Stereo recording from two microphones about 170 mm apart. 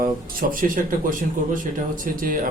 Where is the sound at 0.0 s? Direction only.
55° right (ahead or behind).